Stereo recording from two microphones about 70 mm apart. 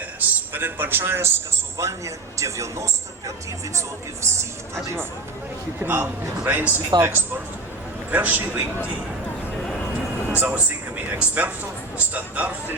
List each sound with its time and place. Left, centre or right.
0.2 s a man's voice: right
1.8 s a man's voice: right
5.8 s speech: right
10.3 s speech: right